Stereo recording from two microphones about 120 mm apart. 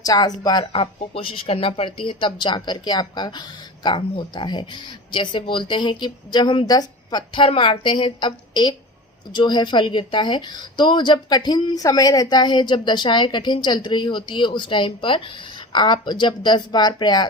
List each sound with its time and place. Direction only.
0.0 s a woman's voice: 35° left (ahead or behind)
0.7 s a woman's voice: 50° left (ahead or behind); by 17.2 s 35° left (ahead or behind)